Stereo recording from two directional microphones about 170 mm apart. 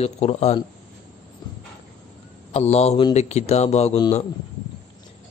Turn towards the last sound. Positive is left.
turn(degrees=40)  # may be behind; listen again after turning